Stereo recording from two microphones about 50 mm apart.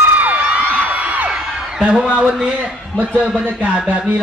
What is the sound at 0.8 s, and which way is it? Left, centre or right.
Music, right.